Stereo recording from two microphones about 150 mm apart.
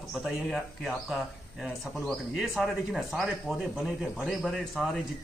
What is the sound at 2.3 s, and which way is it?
Speech, centre (ahead or behind).